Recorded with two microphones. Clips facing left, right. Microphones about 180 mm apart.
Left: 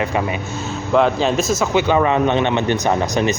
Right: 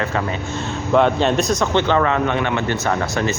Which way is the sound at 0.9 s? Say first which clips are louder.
Even; centre (ahead or behind).